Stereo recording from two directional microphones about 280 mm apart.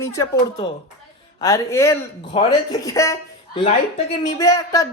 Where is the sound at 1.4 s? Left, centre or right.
Centre.